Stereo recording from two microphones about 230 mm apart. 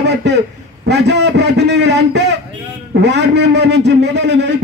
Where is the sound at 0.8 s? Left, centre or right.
Right.